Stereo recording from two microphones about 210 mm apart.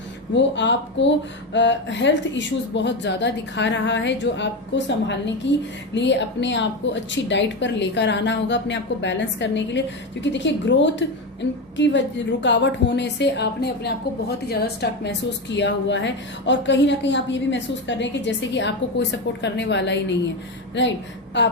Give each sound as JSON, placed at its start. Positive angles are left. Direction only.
{"t": 0.3, "sound": "speech", "side_deg": 60}